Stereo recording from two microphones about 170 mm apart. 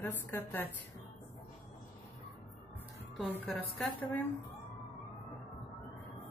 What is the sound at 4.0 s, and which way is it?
Speech, 10° left (ahead or behind).